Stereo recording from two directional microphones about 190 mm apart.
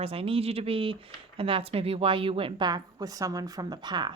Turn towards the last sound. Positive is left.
turn(degrees=-25)  # may be behind; listen again after turning